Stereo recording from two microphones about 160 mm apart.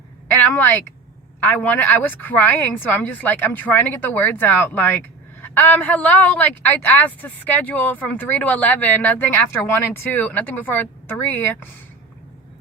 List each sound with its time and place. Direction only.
0.5 s a woman's voice: 10° left (ahead or behind)